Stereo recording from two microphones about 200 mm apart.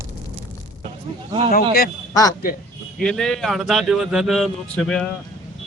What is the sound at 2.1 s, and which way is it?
Speech, 15° left (ahead or behind).